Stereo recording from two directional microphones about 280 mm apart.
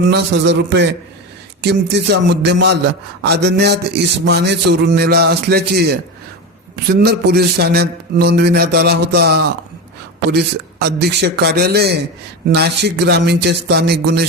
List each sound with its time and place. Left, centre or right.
0.1 s a man's voice: right